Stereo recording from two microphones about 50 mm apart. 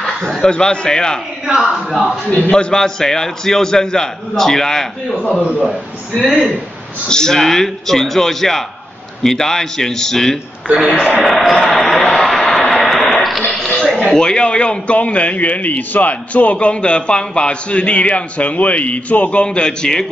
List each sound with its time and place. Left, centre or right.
0.0 s speech: centre
1.5 s speech: centre
2.5 s a man's voice: centre
7.1 s a man's voice: centre
10.7 s speech: centre
11.2 s speech: centre
12.2 s a sound: centre
14.1 s a man's voice: centre